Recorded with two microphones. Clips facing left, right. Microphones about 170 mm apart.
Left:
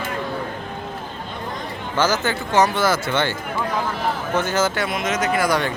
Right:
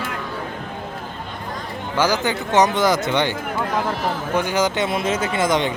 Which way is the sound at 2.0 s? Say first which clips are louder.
Right 1 dB; 15° right (ahead or behind).